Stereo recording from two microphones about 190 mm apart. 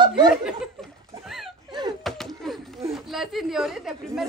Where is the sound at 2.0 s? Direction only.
Centre (ahead or behind).